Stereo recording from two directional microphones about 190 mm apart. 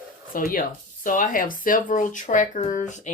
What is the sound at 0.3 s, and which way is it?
Speech, 45° left (ahead or behind).